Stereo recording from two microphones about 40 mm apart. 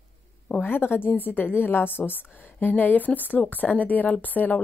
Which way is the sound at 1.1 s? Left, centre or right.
Left.